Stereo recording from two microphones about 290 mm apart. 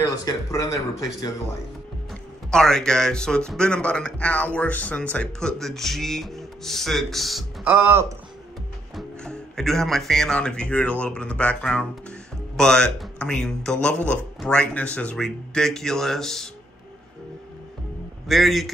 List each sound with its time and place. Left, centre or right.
0.2 s speech: centre
2.5 s speech: centre
18.3 s speech: centre